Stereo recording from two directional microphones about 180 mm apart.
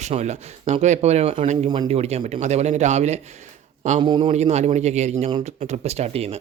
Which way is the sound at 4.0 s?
25° right (ahead or behind).